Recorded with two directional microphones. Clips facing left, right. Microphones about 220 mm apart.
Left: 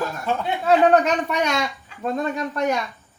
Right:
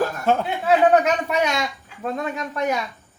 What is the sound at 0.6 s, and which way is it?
A man's voice, 5° right (ahead or behind).